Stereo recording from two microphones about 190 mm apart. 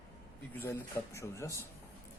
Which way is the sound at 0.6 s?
15° left (ahead or behind).